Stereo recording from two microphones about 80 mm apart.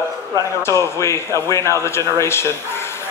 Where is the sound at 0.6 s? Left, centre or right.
Left.